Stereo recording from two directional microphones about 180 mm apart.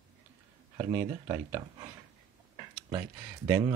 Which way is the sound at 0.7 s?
20° right (ahead or behind).